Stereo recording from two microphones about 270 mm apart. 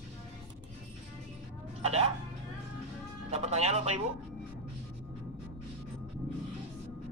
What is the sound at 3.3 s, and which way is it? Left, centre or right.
Speech, right.